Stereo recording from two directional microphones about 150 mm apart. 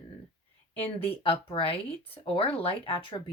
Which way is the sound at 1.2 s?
40° left (ahead or behind).